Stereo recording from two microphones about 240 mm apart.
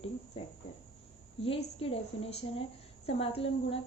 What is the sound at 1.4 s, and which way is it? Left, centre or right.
A woman's voice, left.